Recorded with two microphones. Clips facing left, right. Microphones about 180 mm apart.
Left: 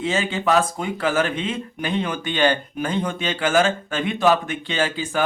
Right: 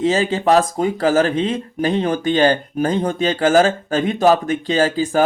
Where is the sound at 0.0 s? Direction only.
35° right (ahead or behind).